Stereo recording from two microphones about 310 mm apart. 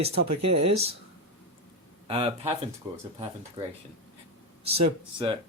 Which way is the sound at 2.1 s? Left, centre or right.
Centre.